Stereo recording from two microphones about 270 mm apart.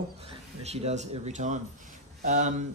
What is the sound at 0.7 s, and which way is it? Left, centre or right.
A man's voice, right.